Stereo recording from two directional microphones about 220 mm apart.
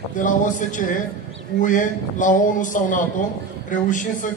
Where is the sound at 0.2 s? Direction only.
35° left (ahead or behind).